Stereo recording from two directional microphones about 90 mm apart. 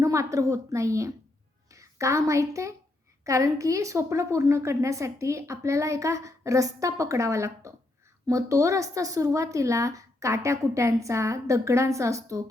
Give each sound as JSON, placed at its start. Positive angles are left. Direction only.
{"t": 0.0, "sound": "a woman's voice", "side_deg": -35}